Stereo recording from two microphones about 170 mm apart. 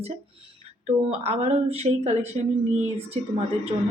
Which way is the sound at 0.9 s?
40° right (ahead or behind).